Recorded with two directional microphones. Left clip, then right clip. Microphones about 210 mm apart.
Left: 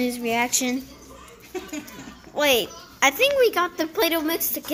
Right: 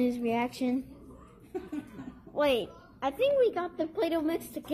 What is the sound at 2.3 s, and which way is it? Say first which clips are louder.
A woman's voice: left 7 dB; 5° left (ahead or behind).